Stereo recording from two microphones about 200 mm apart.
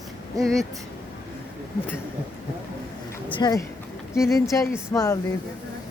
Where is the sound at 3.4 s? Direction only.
20° left (ahead or behind).